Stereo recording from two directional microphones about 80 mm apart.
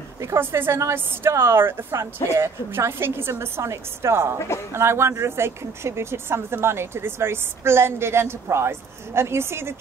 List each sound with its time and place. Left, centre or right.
0.2 s speech: right